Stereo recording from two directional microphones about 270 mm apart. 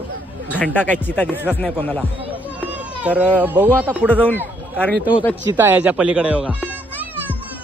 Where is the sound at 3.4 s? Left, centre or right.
Centre.